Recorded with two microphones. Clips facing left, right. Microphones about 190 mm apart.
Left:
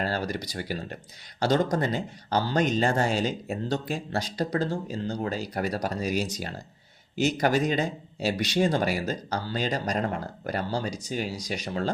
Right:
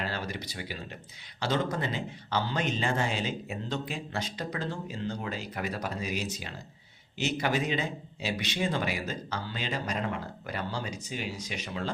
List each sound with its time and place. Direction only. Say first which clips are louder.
0.0 s speech: left 6 dB; 40° left (ahead or behind)